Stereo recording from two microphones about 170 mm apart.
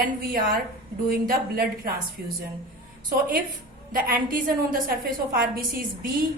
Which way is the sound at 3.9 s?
55° right (ahead or behind).